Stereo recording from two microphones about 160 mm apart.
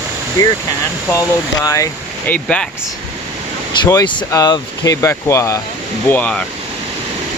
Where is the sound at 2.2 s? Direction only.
10° left (ahead or behind).